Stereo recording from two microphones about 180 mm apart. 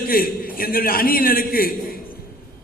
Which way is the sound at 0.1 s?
55° left (ahead or behind).